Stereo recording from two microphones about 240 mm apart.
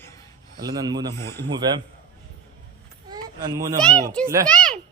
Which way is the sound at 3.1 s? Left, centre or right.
Centre.